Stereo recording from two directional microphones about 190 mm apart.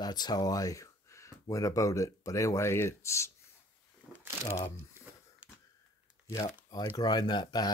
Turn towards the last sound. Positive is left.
turn(degrees=20)  # may be behind; listen again after turning